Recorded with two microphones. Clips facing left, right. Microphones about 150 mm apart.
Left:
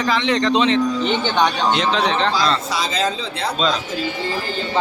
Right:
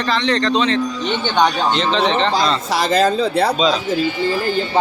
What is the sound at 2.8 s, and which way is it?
Speech, 60° right (ahead or behind).